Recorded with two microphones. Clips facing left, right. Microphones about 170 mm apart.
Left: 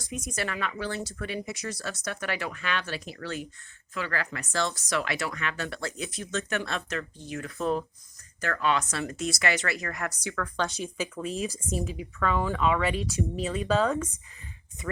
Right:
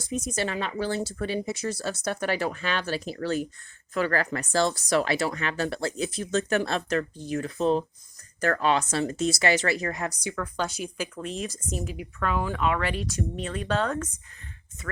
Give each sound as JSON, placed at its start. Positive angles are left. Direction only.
{"t": 0.0, "sound": "speech", "side_deg": -25}
{"t": 8.4, "sound": "speech", "side_deg": -40}
{"t": 9.8, "sound": "speech", "side_deg": -20}